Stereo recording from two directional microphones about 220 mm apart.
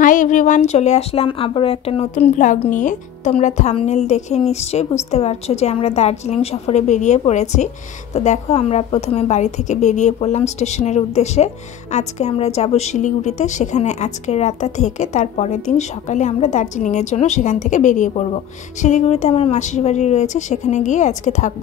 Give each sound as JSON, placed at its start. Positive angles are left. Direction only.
{"t": 0.0, "sound": "speech", "side_deg": 35}